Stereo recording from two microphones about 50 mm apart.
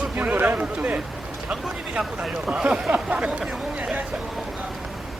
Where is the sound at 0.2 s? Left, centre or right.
Right.